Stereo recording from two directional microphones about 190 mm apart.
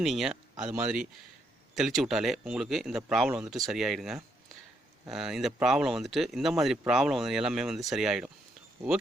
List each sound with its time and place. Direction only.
0.0 s speech: centre (ahead or behind)